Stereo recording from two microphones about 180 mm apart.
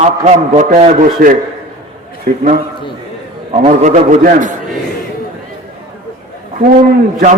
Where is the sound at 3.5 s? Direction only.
40° right (ahead or behind).